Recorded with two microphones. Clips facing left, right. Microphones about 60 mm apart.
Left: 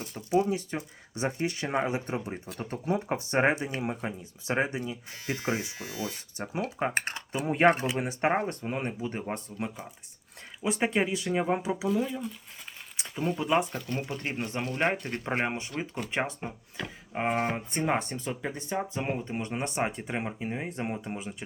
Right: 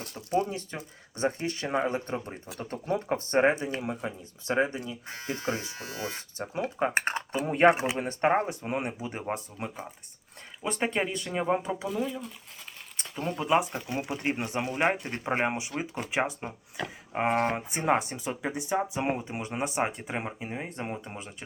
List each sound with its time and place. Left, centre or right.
0.0 s speech: centre
6.0 s speech: right
6.3 s speech: centre
6.9 s speech: centre
7.3 s speech: centre
8.4 s speech: centre